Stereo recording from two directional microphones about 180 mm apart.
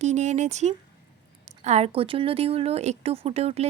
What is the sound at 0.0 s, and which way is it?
A woman's voice, 40° right (ahead or behind).